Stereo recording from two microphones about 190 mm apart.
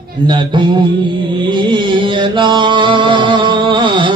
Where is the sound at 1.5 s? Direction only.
25° right (ahead or behind).